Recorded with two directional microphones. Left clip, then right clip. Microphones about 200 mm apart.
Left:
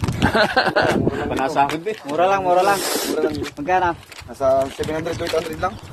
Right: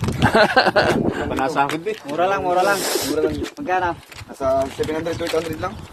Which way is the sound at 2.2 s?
15° left (ahead or behind).